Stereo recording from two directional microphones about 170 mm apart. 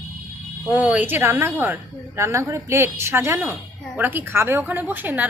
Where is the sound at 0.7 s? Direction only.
10° right (ahead or behind).